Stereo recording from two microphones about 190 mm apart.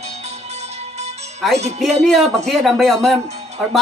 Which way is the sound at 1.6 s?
35° right (ahead or behind).